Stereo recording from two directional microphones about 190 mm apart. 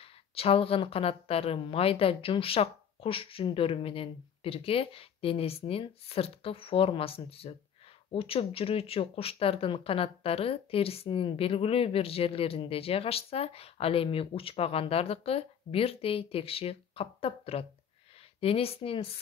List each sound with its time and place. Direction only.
0.3 s a woman's voice: 30° left (ahead or behind)